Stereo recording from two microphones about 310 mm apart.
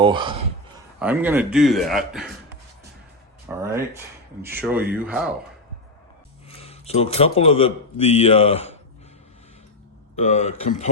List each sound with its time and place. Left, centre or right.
0.0 s a man's voice: centre
0.9 s a man's voice: centre
3.5 s a man's voice: centre
6.6 s speech: centre
10.2 s speech: left